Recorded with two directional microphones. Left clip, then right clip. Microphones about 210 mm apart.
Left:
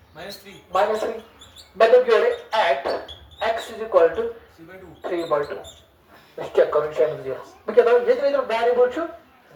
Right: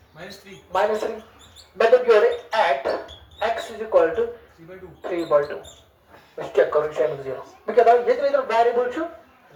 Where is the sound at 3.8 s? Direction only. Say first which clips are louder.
Right 3 dB; 15° right (ahead or behind).